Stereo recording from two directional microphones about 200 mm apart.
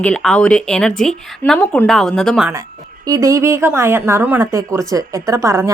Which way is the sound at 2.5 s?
15° right (ahead or behind).